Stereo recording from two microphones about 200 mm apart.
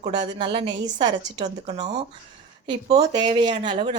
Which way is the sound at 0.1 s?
25° right (ahead or behind).